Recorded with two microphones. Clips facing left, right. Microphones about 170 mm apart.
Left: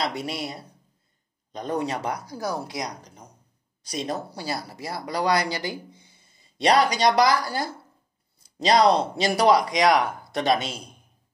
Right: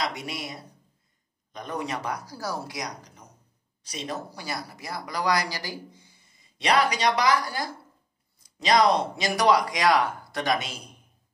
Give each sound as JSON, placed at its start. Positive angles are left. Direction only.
{"t": 0.0, "sound": "speech", "side_deg": 30}
{"t": 3.9, "sound": "speech", "side_deg": 40}
{"t": 6.6, "sound": "speech", "side_deg": 35}